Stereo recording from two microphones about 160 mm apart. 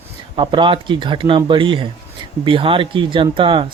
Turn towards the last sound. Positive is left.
turn(degrees=-30)  # may be behind; listen again after turning